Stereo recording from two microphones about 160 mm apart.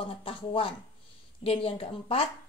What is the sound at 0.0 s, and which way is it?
A woman's voice, 35° left (ahead or behind).